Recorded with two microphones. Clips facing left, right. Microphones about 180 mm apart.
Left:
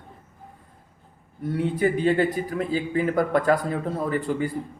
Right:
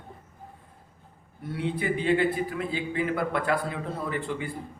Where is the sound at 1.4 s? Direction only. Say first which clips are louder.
Left 6 dB; 45° left (ahead or behind).